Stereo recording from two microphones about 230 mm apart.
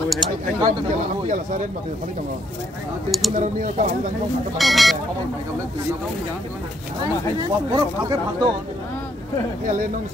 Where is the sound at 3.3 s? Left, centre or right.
Right.